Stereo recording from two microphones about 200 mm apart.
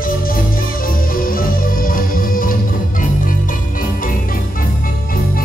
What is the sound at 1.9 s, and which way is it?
Music, 45° left (ahead or behind).